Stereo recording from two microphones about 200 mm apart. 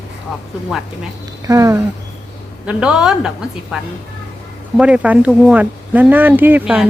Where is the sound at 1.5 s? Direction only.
15° right (ahead or behind).